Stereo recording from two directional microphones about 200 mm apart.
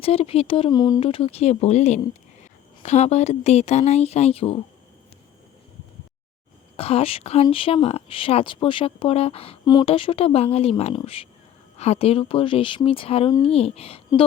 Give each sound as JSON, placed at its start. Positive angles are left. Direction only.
{"t": 0.0, "sound": "speech", "side_deg": 30}
{"t": 6.7, "sound": "speech", "side_deg": 30}